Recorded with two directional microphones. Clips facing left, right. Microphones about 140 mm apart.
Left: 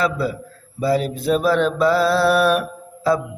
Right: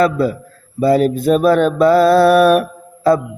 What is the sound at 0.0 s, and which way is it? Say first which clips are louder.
Mantra: right 7 dB; 50° right (ahead or behind).